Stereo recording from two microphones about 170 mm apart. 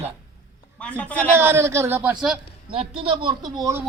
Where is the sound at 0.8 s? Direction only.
5° left (ahead or behind).